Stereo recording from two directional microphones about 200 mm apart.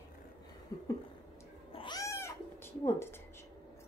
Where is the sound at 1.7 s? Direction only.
25° left (ahead or behind).